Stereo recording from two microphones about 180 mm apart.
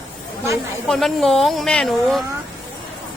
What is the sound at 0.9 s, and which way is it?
Speech, centre (ahead or behind).